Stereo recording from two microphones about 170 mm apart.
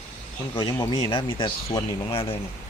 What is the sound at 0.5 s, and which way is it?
Speech, 25° left (ahead or behind).